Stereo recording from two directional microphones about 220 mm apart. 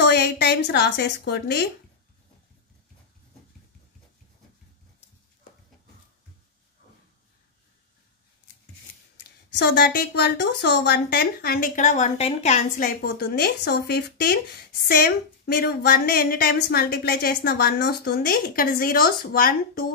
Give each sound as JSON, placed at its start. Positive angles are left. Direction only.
{"t": 0.0, "sound": "a woman's voice", "side_deg": 45}
{"t": 9.6, "sound": "a woman's voice", "side_deg": 45}